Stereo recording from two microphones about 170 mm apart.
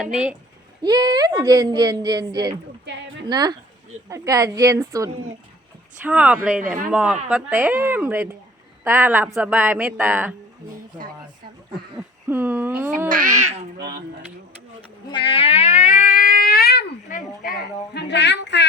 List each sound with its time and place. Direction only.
0.0 s speech: 5° right (ahead or behind)
0.8 s speech: 25° right (ahead or behind)
2.8 s a sound: 90° right
3.2 s speech: 25° right (ahead or behind)
6.0 s speech: 10° right (ahead or behind)
11.9 s speech: 10° right (ahead or behind)
13.1 s a child's voice: 50° right (ahead or behind)
15.1 s cat: 30° left (ahead or behind); by 16.8 s 65° left (ahead or behind)
17.1 s a sound: 55° left (ahead or behind); by 18.6 s 90° left